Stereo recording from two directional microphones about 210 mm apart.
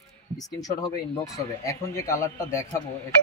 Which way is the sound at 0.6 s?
20° left (ahead or behind).